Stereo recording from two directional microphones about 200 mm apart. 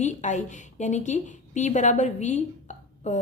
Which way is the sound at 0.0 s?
35° left (ahead or behind).